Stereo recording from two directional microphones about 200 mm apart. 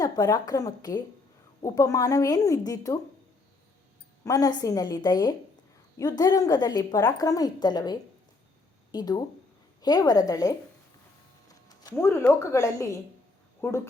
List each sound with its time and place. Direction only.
0.0 s a woman's voice: 20° left (ahead or behind)
4.2 s a woman's voice: 15° left (ahead or behind)